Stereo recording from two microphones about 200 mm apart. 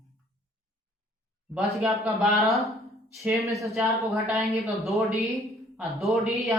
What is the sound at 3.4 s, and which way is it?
Speech, 15° right (ahead or behind).